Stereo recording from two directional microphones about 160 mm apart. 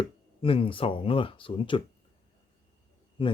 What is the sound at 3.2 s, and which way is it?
Speech, 35° left (ahead or behind).